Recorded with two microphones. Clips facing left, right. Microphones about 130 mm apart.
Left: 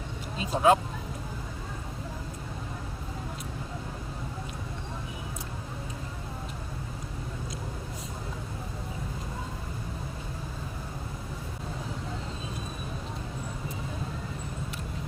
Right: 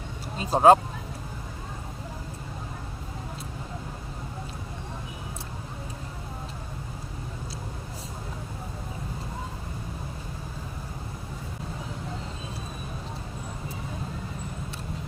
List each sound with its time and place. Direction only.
0.3 s vehicle: 40° right (ahead or behind)